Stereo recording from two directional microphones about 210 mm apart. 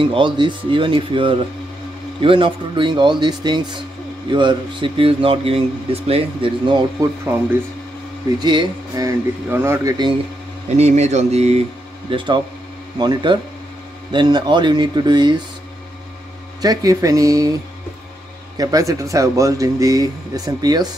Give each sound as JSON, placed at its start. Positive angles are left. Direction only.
{"t": 0.0, "sound": "speech", "side_deg": -25}
{"t": 8.4, "sound": "speech", "side_deg": -20}
{"t": 10.8, "sound": "mantra", "side_deg": -30}
{"t": 12.1, "sound": "speech", "side_deg": -25}
{"t": 16.6, "sound": "speech", "side_deg": -15}
{"t": 18.6, "sound": "speech", "side_deg": -15}